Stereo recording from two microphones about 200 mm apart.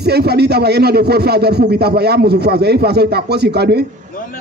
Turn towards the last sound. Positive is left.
turn(degrees=-55)  # may be behind; listen again after turning